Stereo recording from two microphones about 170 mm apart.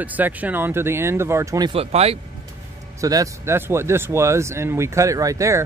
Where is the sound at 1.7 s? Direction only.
35° right (ahead or behind).